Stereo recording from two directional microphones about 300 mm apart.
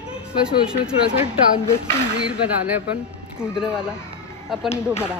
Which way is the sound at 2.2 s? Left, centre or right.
Centre.